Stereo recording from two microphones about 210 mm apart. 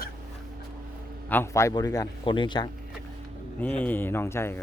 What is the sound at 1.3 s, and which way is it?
A man's voice, 10° left (ahead or behind).